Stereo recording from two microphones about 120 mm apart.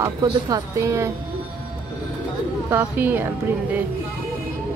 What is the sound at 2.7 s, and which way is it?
Speech, 15° right (ahead or behind).